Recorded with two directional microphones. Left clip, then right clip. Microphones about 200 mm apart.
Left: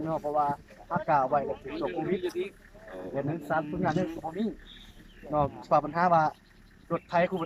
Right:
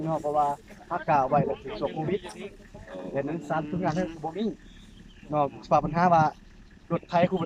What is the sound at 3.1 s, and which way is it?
Speech, centre (ahead or behind).